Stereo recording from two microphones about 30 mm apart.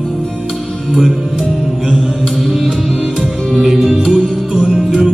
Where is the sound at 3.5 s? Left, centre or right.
Centre.